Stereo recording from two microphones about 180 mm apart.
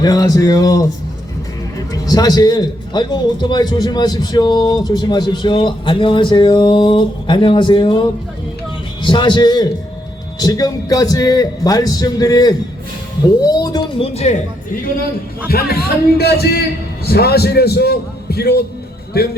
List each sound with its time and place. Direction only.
0.0 s a man's voice: 20° left (ahead or behind)
1.9 s a man's voice: 20° left (ahead or behind)
14.1 s a man's voice: 35° left (ahead or behind); by 19.4 s 60° left (ahead or behind)